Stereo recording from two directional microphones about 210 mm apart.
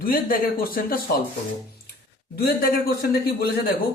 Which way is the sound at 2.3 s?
45° left (ahead or behind).